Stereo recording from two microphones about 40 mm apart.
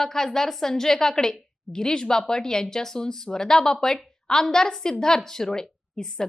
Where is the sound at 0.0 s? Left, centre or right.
Centre.